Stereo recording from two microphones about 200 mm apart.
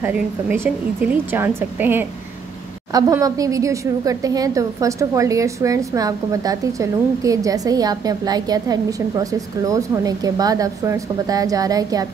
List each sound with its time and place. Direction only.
0.0 s a woman's voice: 10° right (ahead or behind)